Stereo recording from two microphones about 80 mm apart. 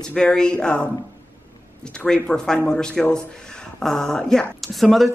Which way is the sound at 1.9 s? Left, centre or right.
Centre.